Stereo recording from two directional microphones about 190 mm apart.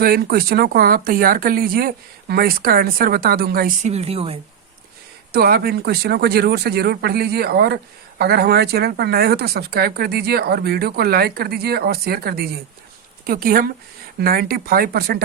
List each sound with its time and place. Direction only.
0.0 s speech: 55° right (ahead or behind)
3.8 s speech: 35° right (ahead or behind)
5.3 s speech: 55° right (ahead or behind)